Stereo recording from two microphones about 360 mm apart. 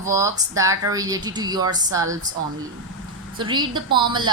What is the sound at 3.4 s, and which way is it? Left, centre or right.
Speech, centre.